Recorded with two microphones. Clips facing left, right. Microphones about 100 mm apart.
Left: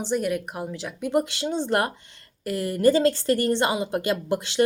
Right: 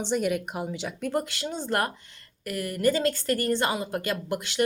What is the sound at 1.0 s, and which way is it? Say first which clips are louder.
A woman's voice: left 6 dB; 20° left (ahead or behind).